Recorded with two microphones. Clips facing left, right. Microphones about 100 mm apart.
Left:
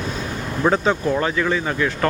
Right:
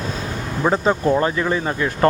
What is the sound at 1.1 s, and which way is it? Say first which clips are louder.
Speech: right 2 dB; 30° right (ahead or behind).